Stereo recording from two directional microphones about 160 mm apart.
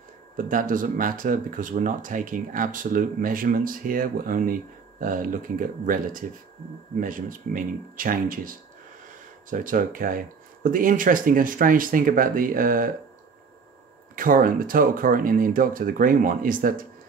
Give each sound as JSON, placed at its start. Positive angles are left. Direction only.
{"t": 0.5, "sound": "speech", "side_deg": -55}
{"t": 14.1, "sound": "speech", "side_deg": -60}